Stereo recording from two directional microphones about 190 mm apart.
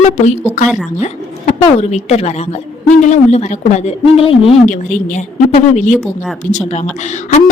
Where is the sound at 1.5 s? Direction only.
35° left (ahead or behind).